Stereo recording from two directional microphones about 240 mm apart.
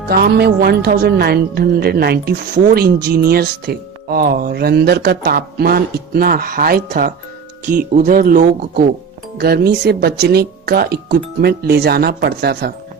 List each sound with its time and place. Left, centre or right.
0.0 s speech: right